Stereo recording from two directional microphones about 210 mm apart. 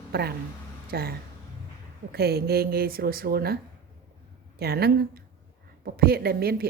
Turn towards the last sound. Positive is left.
turn(degrees=-45)  # may be behind; listen again after turning